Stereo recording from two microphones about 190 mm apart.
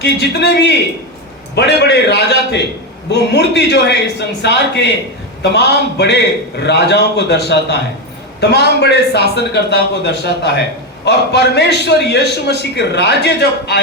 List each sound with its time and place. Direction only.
0.0 s a man's voice: 60° left (ahead or behind)